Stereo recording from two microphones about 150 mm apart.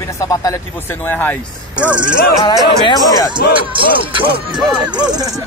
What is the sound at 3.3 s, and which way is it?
Music, 35° right (ahead or behind).